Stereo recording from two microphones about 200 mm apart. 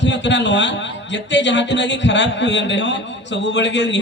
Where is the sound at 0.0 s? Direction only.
60° left (ahead or behind).